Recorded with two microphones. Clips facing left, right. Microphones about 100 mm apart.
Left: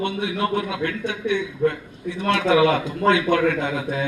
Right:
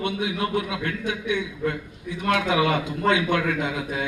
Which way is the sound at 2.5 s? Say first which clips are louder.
Left 5 dB; 40° left (ahead or behind).